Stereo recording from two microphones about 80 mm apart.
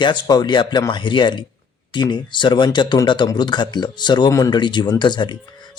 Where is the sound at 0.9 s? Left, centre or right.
Left.